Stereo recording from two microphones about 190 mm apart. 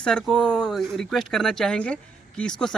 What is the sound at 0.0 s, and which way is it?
Speech, 5° left (ahead or behind).